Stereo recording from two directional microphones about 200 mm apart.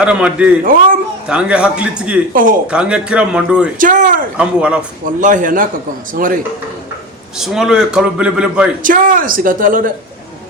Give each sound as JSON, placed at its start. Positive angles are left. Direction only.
{"t": 0.0, "sound": "a man's voice", "side_deg": -5}
{"t": 0.6, "sound": "speech", "side_deg": -45}
{"t": 1.3, "sound": "a man's voice", "side_deg": -5}
{"t": 2.3, "sound": "speech", "side_deg": -45}
{"t": 2.6, "sound": "a man's voice", "side_deg": -5}
{"t": 3.8, "sound": "a man's voice", "side_deg": -40}
{"t": 4.4, "sound": "a man's voice", "side_deg": -5}
{"t": 5.2, "sound": "a man's voice", "side_deg": -40}
{"t": 7.3, "sound": "a man's voice", "side_deg": -5}
{"t": 8.8, "sound": "speech", "side_deg": -40}